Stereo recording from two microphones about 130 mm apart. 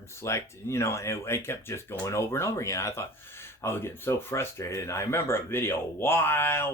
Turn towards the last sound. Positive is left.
turn(degrees=20)  # may be behind; listen again after turning